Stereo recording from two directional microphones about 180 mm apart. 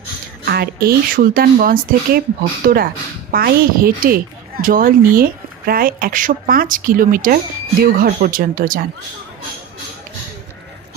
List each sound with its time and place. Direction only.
0.5 s a woman's voice: 60° right (ahead or behind)